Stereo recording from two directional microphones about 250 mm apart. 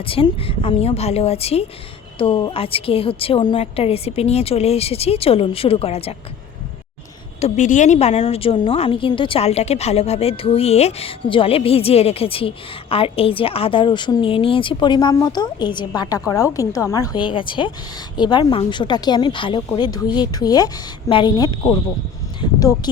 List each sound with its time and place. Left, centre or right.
0.0 s a woman's voice: left
7.4 s a woman's voice: left